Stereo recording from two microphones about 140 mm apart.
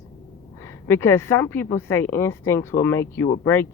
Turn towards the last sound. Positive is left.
turn(degrees=15)  # may be behind; listen again after turning